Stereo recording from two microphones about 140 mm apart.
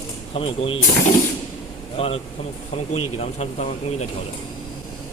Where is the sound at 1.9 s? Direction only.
45° left (ahead or behind).